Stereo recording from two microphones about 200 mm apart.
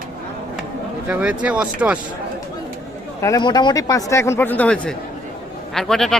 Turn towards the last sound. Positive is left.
turn(degrees=0)  # may be behind; listen again after turning